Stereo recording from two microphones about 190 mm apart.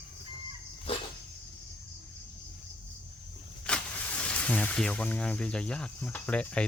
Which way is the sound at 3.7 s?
5° left (ahead or behind).